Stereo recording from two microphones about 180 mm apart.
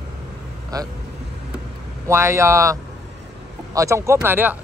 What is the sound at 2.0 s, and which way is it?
A man's voice, 15° right (ahead or behind).